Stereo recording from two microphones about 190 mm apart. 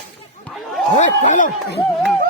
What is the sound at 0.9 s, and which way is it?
Speech, 40° left (ahead or behind).